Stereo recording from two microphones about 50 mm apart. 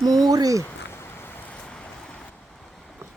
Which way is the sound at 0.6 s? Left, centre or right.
Left.